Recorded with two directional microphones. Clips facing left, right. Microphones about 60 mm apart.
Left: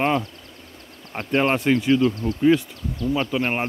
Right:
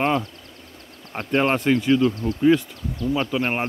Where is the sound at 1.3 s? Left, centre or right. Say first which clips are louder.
Even; centre.